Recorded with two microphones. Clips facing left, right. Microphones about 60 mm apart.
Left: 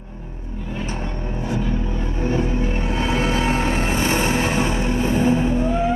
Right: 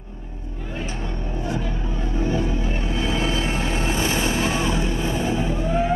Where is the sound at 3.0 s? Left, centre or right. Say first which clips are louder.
Left 3 dB; left.